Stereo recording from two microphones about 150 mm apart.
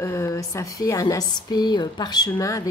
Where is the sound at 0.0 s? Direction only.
20° left (ahead or behind).